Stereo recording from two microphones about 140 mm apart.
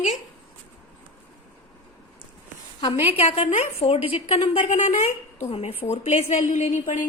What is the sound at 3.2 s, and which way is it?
A woman's voice, 50° left (ahead or behind).